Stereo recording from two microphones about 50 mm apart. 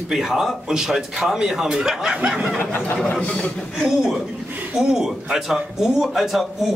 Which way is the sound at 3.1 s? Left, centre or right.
Left.